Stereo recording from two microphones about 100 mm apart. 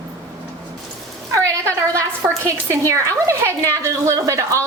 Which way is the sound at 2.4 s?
30° right (ahead or behind).